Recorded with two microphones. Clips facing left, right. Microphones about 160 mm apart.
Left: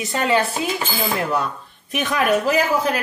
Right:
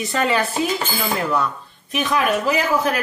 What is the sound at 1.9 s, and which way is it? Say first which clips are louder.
Speech: left 1 dB; 50° left (ahead or behind).